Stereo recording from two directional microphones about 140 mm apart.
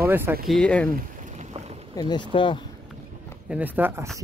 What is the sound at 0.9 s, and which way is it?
Rowboat, 60° right (ahead or behind).